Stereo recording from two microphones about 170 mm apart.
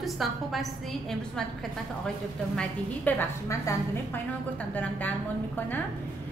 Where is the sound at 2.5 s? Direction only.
10° left (ahead or behind).